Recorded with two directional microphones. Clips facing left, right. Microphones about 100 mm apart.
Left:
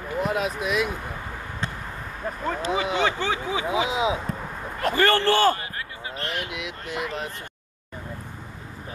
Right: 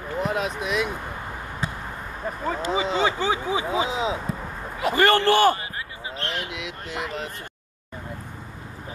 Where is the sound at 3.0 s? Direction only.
15° right (ahead or behind).